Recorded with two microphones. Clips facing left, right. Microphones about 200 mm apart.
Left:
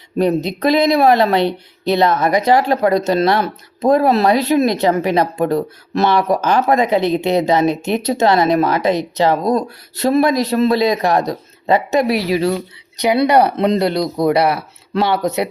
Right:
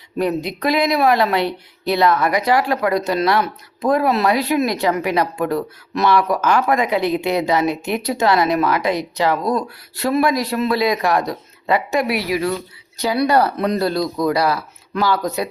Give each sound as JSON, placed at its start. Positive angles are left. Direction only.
{"t": 0.2, "sound": "speech", "side_deg": 25}